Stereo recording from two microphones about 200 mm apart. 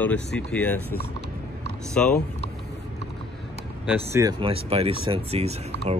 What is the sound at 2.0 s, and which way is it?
Speech, 5° left (ahead or behind).